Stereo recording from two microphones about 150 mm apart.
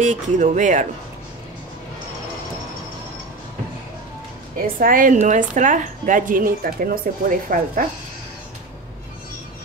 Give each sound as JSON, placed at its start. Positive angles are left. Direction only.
{"t": 0.0, "sound": "a woman's voice", "side_deg": -55}
{"t": 4.6, "sound": "a woman's voice", "side_deg": -65}